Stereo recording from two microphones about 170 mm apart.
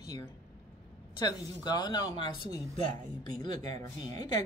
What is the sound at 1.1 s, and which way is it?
A woman's voice, 25° left (ahead or behind).